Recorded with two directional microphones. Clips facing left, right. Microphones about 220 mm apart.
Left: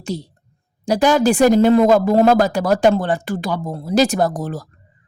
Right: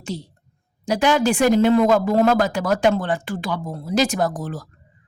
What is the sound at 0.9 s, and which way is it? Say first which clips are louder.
A woman's voice: left 4 dB; 40° left (ahead or behind).